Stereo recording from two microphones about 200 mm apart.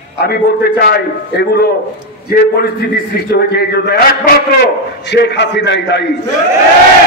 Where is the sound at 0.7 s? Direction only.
50° left (ahead or behind).